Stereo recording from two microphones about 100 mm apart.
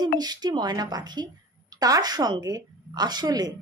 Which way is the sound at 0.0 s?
45° right (ahead or behind).